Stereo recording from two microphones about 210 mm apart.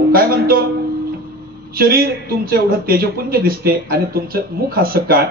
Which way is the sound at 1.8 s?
45° right (ahead or behind).